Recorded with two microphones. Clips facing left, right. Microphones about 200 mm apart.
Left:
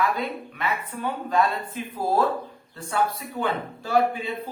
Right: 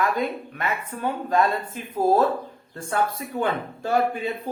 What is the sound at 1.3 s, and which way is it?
Speech, 45° right (ahead or behind).